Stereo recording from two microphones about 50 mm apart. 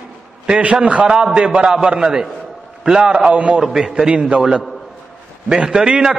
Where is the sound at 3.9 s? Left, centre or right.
Centre.